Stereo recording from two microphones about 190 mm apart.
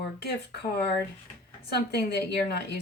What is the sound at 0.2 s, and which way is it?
A woman's voice, 60° left (ahead or behind).